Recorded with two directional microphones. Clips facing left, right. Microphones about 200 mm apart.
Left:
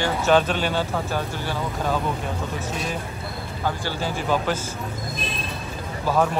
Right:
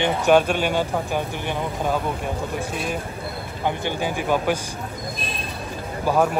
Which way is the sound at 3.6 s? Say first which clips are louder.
Right 3 dB; 20° right (ahead or behind).